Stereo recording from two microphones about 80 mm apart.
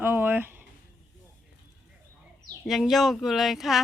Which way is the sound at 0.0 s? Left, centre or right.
Right.